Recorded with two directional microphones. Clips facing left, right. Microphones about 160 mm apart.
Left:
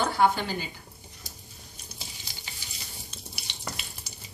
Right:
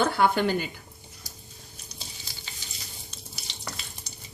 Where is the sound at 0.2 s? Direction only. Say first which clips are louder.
Right 2 dB; 60° right (ahead or behind).